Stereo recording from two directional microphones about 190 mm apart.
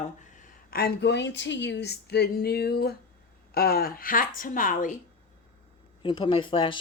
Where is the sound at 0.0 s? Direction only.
40° left (ahead or behind).